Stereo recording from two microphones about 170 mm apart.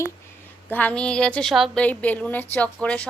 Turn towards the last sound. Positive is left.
turn(degrees=5)  # may be behind; listen again after turning